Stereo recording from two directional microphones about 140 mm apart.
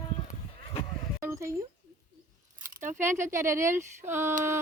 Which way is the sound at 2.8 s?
60° right (ahead or behind).